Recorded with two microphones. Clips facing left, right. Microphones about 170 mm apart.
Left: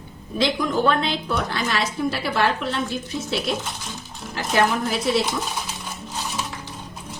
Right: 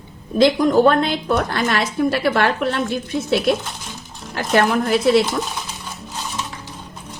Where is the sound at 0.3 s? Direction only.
50° right (ahead or behind).